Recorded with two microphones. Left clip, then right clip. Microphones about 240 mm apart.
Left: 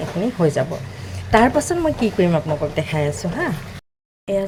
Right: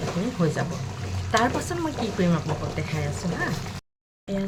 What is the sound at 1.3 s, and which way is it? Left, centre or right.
Speech, left.